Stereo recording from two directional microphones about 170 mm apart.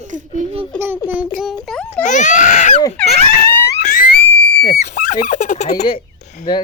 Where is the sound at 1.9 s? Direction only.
45° left (ahead or behind).